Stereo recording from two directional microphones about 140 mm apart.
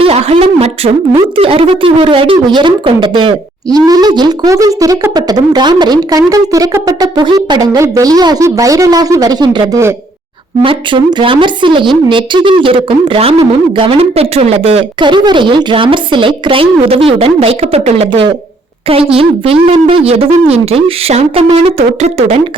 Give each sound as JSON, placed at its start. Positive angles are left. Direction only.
{"t": 0.0, "sound": "a woman's voice", "side_deg": -45}